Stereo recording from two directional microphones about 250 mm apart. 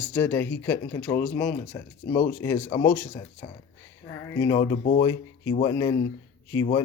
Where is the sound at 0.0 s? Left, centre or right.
Centre.